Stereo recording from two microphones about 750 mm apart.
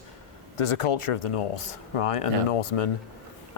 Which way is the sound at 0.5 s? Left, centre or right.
Left.